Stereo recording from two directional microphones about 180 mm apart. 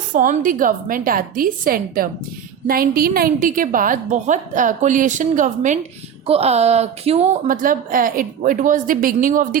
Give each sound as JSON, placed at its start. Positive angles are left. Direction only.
{"t": 0.1, "sound": "a woman's voice", "side_deg": -50}
{"t": 7.4, "sound": "a woman's voice", "side_deg": -50}